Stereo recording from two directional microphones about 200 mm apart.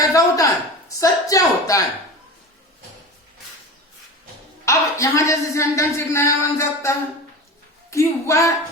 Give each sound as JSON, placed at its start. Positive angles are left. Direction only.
{"t": 0.0, "sound": "a woman's voice", "side_deg": 15}
{"t": 4.6, "sound": "a man's voice", "side_deg": 15}